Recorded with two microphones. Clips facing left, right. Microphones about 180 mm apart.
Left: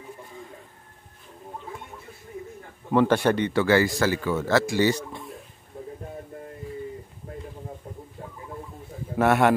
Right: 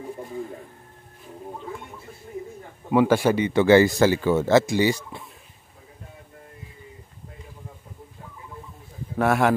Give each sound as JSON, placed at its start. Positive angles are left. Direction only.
{"t": 2.9, "sound": "speech", "side_deg": -10}
{"t": 3.5, "sound": "speech", "side_deg": -20}
{"t": 9.1, "sound": "a man's voice", "side_deg": 0}